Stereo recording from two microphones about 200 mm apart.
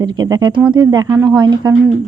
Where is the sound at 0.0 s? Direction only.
20° right (ahead or behind).